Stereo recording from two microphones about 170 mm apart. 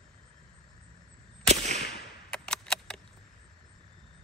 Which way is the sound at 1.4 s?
45° right (ahead or behind).